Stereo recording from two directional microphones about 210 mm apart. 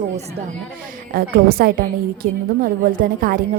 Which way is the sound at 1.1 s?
45° right (ahead or behind).